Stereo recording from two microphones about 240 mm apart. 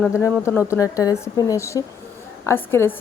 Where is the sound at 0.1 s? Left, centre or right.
Centre.